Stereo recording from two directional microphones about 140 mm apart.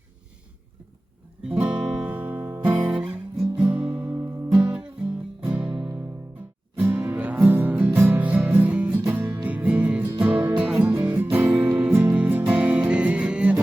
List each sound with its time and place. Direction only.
1.5 s guitar: 10° right (ahead or behind)
4.0 s music: 20° right (ahead or behind)